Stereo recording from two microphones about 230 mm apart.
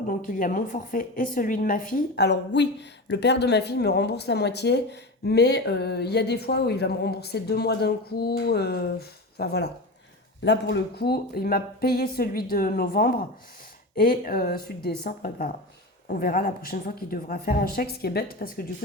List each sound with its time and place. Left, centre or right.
0.1 s speech: left